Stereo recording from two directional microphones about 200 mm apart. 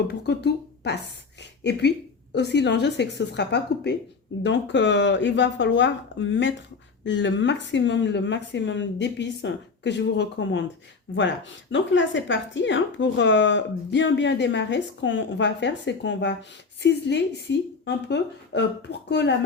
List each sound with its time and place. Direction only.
0.1 s a woman's voice: 55° left (ahead or behind)